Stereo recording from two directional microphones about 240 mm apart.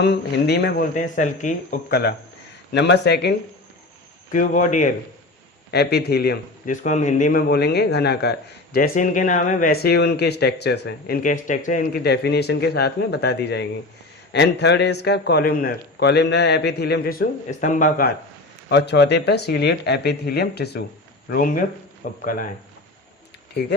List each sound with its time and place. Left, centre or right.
0.0 s a man's voice: left
4.3 s speech: left
5.7 s a man's voice: left
18.7 s a man's voice: left
23.6 s a man's voice: left